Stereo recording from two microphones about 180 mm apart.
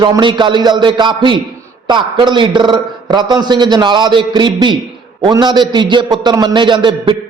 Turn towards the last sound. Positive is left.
turn(degrees=-25)  # may be behind; listen again after turning